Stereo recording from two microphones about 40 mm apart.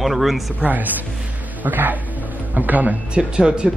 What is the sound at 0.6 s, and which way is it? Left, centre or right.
Speech, right.